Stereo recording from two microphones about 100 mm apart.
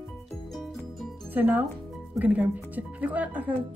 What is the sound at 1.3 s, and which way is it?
Speech, 20° right (ahead or behind).